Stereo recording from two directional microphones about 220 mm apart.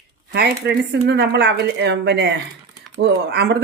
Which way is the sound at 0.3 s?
45° right (ahead or behind).